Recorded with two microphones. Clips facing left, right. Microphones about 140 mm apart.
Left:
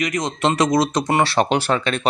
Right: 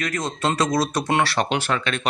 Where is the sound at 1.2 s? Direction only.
30° left (ahead or behind).